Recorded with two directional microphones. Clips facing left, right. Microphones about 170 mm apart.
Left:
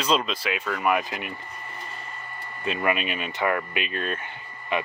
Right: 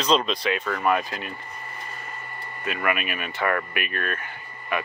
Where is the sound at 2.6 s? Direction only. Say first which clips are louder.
Left 1 dB; 25° left (ahead or behind).